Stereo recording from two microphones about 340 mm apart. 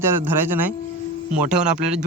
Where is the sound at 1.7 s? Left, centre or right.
Right.